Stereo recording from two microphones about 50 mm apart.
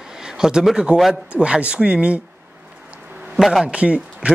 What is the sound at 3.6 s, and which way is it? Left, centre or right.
Speech, right.